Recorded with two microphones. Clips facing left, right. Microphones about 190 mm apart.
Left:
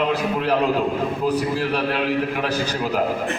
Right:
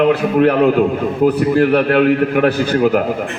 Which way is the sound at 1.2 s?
60° right (ahead or behind).